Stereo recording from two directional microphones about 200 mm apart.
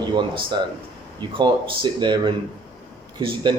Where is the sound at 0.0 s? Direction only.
20° right (ahead or behind).